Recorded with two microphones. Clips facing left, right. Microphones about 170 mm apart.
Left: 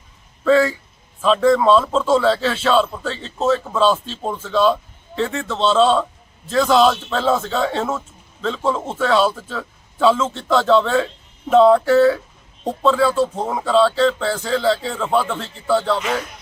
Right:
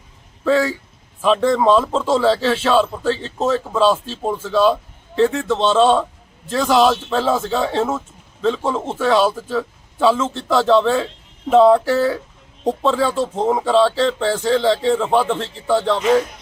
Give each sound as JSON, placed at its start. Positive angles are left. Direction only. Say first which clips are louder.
{"t": 1.2, "sound": "speech", "louder": "left 1 dB", "side_deg": -15}